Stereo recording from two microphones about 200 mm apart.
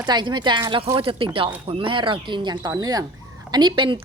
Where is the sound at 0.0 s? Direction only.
20° right (ahead or behind).